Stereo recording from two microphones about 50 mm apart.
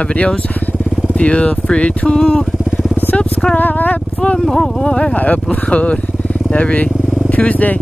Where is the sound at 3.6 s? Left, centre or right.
Left.